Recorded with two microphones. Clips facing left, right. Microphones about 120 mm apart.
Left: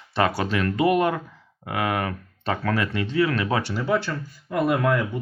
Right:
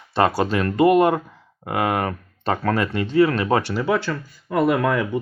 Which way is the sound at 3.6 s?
90° right.